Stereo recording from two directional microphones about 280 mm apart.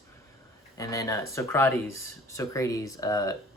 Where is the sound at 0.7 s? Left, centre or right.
Centre.